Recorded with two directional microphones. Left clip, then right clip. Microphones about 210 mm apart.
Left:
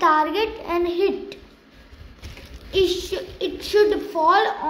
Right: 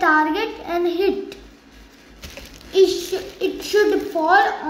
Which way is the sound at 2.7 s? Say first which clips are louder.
Right 4 dB; 30° left (ahead or behind).